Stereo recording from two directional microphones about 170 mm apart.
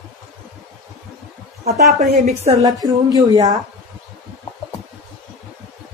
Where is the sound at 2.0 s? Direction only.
40° right (ahead or behind).